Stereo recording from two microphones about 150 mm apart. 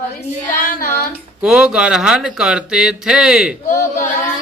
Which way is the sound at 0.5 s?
65° left (ahead or behind).